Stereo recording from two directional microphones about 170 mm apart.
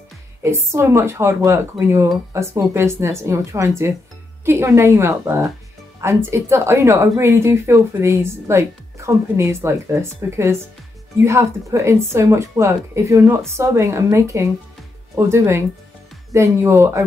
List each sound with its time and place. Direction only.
0.4 s speech: 15° right (ahead or behind)